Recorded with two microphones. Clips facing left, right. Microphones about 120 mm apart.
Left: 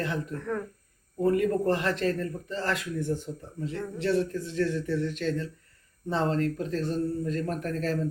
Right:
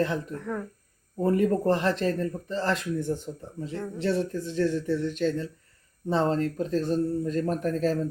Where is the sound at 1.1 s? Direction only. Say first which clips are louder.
Right 1 dB; 30° right (ahead or behind).